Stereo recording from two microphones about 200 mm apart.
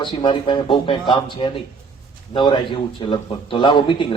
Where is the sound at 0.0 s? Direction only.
25° left (ahead or behind).